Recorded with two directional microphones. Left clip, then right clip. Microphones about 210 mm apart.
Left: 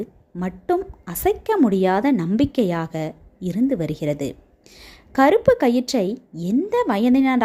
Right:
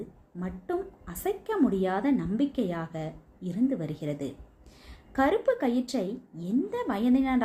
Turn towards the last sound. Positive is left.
turn(degrees=45)  # may be behind; listen again after turning